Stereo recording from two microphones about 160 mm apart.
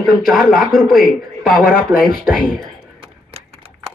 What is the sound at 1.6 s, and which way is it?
Speech, 65° left (ahead or behind).